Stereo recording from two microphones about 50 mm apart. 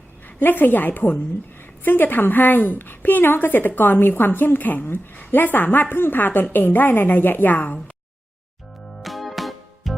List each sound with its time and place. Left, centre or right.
0.3 s a woman's voice: left
9.0 s music: centre